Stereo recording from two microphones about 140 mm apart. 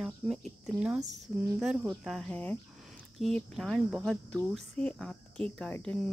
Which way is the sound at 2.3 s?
10° left (ahead or behind).